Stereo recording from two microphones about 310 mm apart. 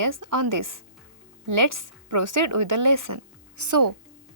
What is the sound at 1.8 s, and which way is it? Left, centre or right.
A woman's voice, right.